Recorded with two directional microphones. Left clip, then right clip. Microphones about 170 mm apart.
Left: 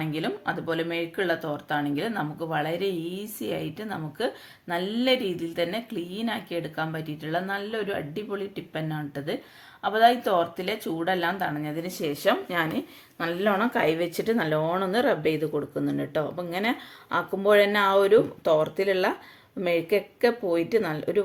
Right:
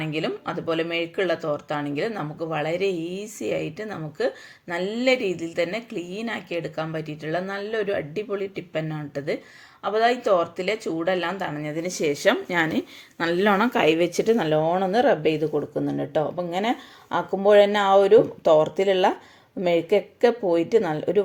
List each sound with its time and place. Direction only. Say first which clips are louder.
0.0 s speech: right 2 dB; 10° right (ahead or behind)
2.9 s speech: right 3 dB; 45° right (ahead or behind)
3.2 s speech: right 4 dB; 10° right (ahead or behind); by 13.7 s 35° right (ahead or behind)
13.7 s speech: right 5 dB; 15° right (ahead or behind)